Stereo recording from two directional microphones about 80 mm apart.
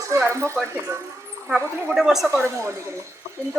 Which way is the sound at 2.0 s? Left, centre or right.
Centre.